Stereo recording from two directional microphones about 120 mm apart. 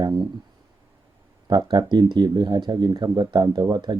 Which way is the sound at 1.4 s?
35° right (ahead or behind).